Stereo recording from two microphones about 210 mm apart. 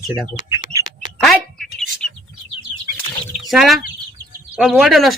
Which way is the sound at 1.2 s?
Centre (ahead or behind).